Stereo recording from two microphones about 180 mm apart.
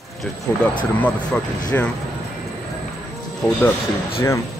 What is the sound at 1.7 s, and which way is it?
Speech, 10° left (ahead or behind).